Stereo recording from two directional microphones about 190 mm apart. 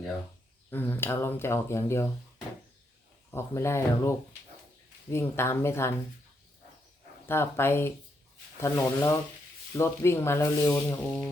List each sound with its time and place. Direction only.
0.7 s speech: 10° left (ahead or behind)
3.3 s speech: 15° left (ahead or behind)
7.3 s speech: 10° left (ahead or behind)